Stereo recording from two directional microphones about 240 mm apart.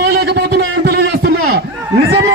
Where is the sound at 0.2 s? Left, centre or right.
Right.